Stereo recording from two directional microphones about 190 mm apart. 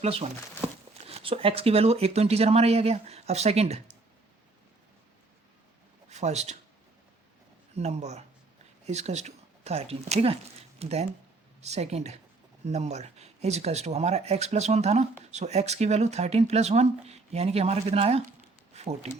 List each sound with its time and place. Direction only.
0.0 s speech: 35° right (ahead or behind)
6.1 s speech: 35° right (ahead or behind)
7.8 s speech: 35° right (ahead or behind)